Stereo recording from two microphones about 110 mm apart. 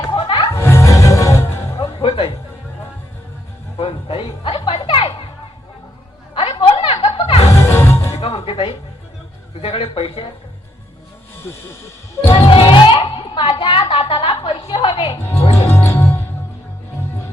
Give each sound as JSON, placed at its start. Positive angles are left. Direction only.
{"t": 0.1, "sound": "music", "side_deg": 50}
{"t": 0.5, "sound": "music", "side_deg": 25}
{"t": 1.8, "sound": "music", "side_deg": 55}
{"t": 3.8, "sound": "music", "side_deg": 55}
{"t": 6.3, "sound": "music", "side_deg": 55}
{"t": 7.4, "sound": "music", "side_deg": 25}
{"t": 8.1, "sound": "music", "side_deg": 60}
{"t": 9.6, "sound": "a sound", "side_deg": 55}
{"t": 11.4, "sound": "music", "side_deg": 20}
{"t": 12.3, "sound": "music", "side_deg": 55}
{"t": 15.2, "sound": "music", "side_deg": 20}